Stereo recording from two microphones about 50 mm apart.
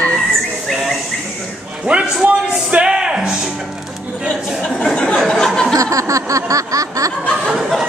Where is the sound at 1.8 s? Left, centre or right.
Centre.